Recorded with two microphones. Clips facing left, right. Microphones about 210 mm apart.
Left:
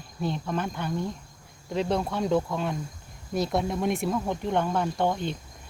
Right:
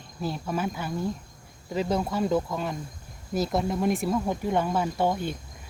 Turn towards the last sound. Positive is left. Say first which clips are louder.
# even
turn(degrees=-10)  # may be behind; listen again after turning